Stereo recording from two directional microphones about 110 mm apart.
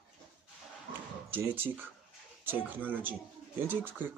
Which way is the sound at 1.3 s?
20° right (ahead or behind).